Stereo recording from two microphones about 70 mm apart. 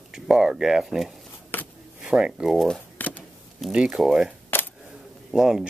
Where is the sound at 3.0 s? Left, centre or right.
Left.